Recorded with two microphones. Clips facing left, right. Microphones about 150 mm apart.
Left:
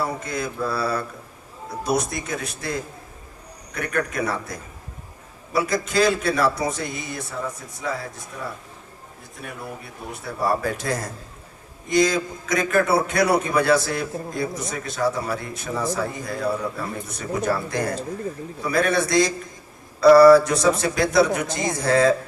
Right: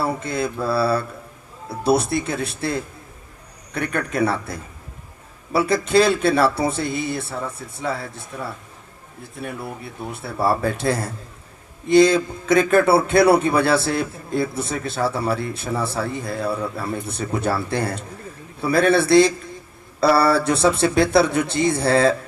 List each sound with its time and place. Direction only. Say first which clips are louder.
0.0 s mantra: right 3 dB; 30° right (ahead or behind)
1.8 s a man's voice: right 5 dB; 30° right (ahead or behind)
5.5 s a man's voice: right 4 dB; 30° right (ahead or behind)
10.4 s a man's voice: right 3 dB; 30° right (ahead or behind)